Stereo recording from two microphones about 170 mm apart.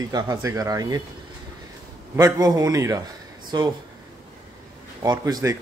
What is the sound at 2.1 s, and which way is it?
Speech, 20° right (ahead or behind).